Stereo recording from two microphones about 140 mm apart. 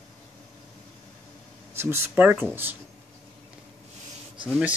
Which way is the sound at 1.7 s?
15° right (ahead or behind).